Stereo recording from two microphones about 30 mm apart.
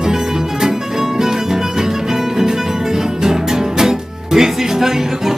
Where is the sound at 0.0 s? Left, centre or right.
Centre.